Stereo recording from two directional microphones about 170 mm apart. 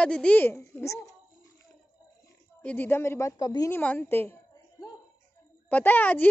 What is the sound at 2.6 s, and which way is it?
A child's voice, 10° left (ahead or behind).